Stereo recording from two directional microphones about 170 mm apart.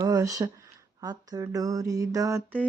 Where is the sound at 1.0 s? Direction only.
20° right (ahead or behind).